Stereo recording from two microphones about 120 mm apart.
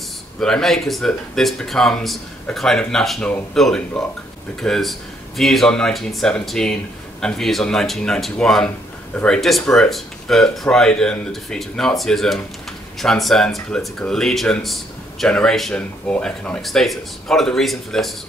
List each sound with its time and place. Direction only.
0.4 s speech: 5° left (ahead or behind)